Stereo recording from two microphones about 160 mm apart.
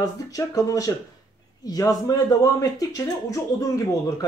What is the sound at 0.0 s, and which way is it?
Speech, 20° left (ahead or behind).